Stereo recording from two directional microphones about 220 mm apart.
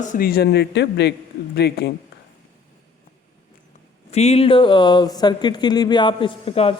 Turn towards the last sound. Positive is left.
turn(degrees=25)  # may be behind; listen again after turning